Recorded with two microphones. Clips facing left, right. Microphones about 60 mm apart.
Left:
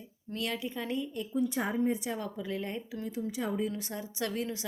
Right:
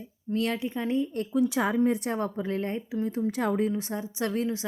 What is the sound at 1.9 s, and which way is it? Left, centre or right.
Speech, right.